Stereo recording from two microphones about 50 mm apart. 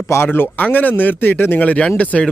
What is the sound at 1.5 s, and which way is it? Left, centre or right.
Speech, left.